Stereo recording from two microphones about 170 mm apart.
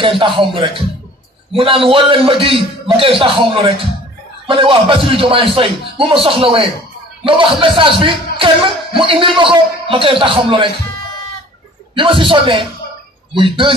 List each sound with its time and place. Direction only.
0.4 s speech: 30° right (ahead or behind)
11.9 s a man's voice: 30° right (ahead or behind)